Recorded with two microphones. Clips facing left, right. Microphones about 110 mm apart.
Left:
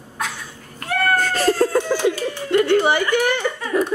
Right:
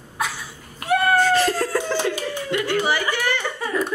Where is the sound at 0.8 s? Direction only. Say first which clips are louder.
Right 2 dB; 15° right (ahead or behind).